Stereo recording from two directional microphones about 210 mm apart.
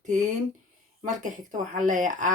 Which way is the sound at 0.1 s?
35° right (ahead or behind).